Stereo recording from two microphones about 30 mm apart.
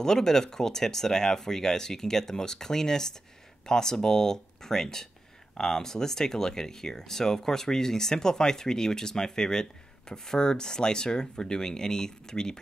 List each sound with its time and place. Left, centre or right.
0.0 s speech: centre